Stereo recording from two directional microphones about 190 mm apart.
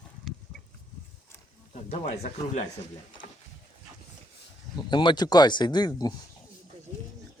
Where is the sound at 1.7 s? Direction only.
35° left (ahead or behind).